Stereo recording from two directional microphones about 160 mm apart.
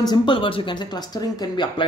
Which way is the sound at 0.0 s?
30° left (ahead or behind).